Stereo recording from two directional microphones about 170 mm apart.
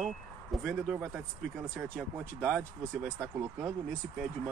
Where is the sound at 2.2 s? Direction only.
10° right (ahead or behind).